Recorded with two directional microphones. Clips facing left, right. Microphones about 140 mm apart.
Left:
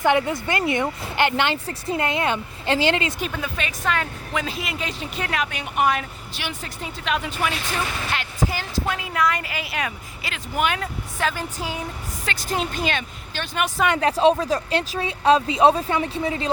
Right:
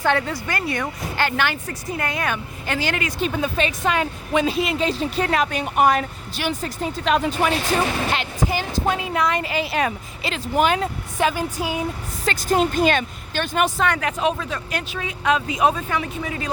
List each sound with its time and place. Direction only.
0.0 s speech: 15° left (ahead or behind)
3.4 s a woman's voice: 25° right (ahead or behind)
8.1 s speech: 20° right (ahead or behind)
11.2 s speech: 15° right (ahead or behind)
12.2 s speech: 45° right (ahead or behind)
14.0 s speech: 30° left (ahead or behind)